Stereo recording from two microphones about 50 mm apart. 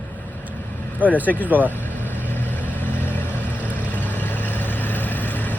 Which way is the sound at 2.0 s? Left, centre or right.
Left.